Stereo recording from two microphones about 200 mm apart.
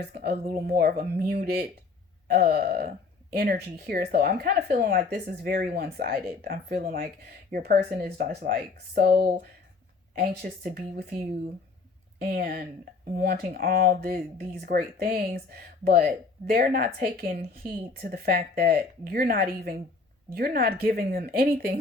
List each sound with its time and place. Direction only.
0.0 s speech: 55° right (ahead or behind)
12.2 s speech: 45° right (ahead or behind)